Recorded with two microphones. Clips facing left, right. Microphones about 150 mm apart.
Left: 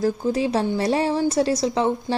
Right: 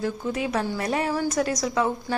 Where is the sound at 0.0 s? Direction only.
35° left (ahead or behind).